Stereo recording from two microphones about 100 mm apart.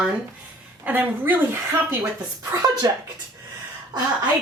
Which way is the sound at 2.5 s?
40° right (ahead or behind).